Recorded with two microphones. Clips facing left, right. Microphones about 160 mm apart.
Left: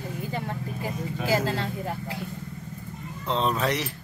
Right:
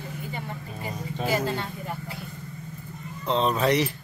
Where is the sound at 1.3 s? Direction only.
90° left.